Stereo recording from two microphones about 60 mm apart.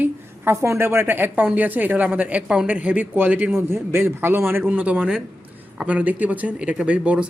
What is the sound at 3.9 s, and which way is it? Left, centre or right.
Speech, right.